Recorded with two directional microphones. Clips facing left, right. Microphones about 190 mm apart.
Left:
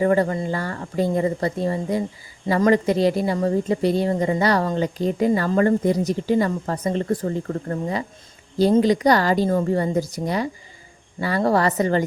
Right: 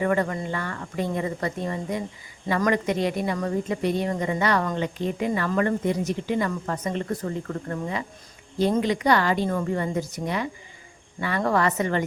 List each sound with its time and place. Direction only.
0.0 s speech: 35° left (ahead or behind)